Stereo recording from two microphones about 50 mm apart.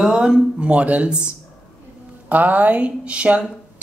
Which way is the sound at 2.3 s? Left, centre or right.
Right.